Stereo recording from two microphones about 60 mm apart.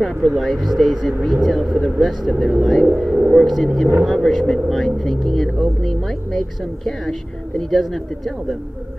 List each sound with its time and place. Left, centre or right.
0.4 s speech: centre
3.1 s a sound: centre
3.3 s speech: centre